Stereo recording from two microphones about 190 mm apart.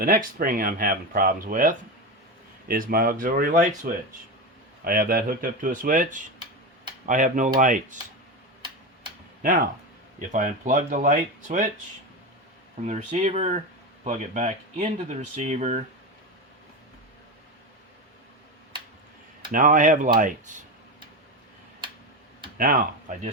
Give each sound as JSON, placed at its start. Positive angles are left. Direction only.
{"t": 0.0, "sound": "speech", "side_deg": -50}
{"t": 4.8, "sound": "speech", "side_deg": -50}
{"t": 10.2, "sound": "speech", "side_deg": -45}
{"t": 12.8, "sound": "speech", "side_deg": -40}
{"t": 19.5, "sound": "speech", "side_deg": -45}
{"t": 22.5, "sound": "speech", "side_deg": -50}